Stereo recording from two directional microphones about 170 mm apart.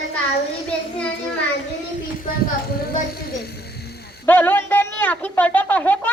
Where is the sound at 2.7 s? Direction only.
65° left (ahead or behind).